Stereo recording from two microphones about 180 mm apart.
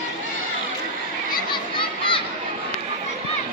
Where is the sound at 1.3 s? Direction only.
25° left (ahead or behind).